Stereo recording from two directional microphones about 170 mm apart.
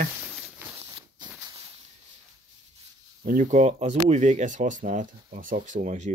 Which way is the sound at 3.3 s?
45° right (ahead or behind).